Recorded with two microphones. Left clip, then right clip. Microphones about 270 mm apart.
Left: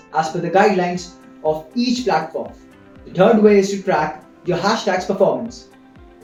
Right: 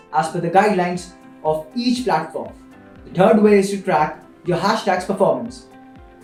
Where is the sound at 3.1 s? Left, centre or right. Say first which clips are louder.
Left 1 dB; right.